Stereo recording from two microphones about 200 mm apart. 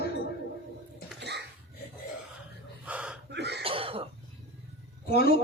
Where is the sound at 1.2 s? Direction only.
55° right (ahead or behind).